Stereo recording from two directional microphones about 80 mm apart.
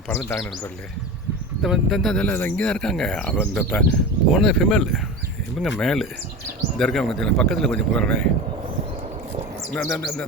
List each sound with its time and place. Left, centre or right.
0.3 s speech: left
1.6 s speech: centre
2.2 s speech: left
2.6 s speech: centre
9.7 s speech: centre